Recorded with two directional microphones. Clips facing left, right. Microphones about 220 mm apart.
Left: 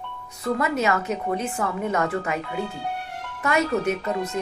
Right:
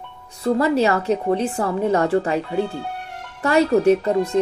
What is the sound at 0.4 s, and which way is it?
Speech, 30° right (ahead or behind).